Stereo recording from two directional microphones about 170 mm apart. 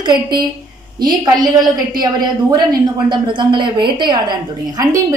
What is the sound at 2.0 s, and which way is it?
A woman's voice, 25° right (ahead or behind).